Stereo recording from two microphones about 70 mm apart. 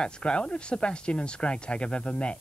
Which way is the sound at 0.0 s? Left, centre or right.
Centre.